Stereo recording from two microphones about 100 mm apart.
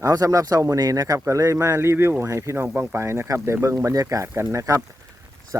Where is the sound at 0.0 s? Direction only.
35° right (ahead or behind).